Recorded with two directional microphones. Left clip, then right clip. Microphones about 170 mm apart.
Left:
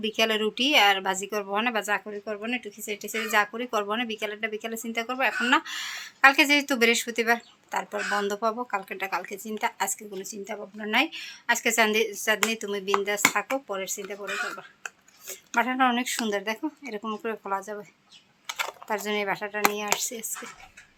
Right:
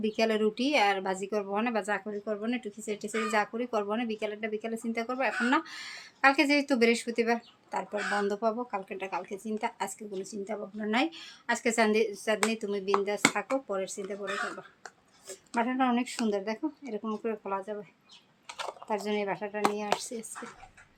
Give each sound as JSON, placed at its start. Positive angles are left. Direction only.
{"t": 0.0, "sound": "speech", "side_deg": -5}
{"t": 14.8, "sound": "a sound", "side_deg": -5}
{"t": 16.2, "sound": "speech", "side_deg": 0}